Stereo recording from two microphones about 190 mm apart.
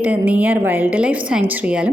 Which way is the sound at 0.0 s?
10° right (ahead or behind).